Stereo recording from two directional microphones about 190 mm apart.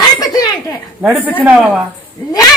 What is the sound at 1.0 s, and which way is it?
Speech, 10° right (ahead or behind).